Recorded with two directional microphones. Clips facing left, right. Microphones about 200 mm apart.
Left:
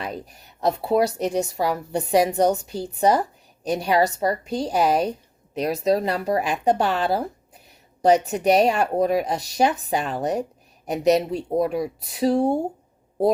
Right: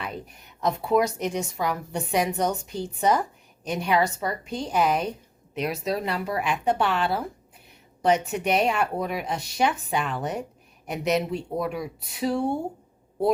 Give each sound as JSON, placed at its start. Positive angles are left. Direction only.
{"t": 0.0, "sound": "a woman's voice", "side_deg": 35}